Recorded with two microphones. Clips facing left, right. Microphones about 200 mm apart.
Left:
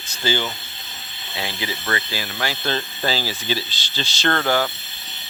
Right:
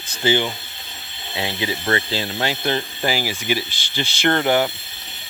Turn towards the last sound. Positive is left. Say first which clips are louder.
# right 3 dB
turn(degrees=-20)  # may be behind; listen again after turning